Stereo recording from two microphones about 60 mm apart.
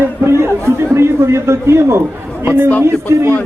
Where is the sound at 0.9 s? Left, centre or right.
Right.